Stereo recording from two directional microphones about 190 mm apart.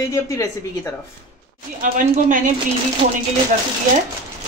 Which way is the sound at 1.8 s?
45° right (ahead or behind).